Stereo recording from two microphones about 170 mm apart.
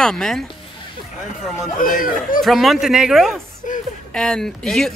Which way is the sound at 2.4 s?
Centre (ahead or behind).